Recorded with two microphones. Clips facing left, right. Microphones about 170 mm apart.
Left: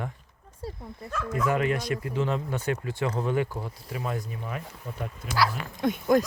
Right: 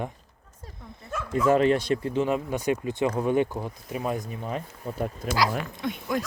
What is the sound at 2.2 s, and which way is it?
Speech, 15° right (ahead or behind).